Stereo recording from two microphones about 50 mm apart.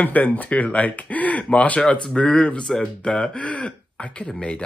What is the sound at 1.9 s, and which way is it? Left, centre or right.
Speech, centre.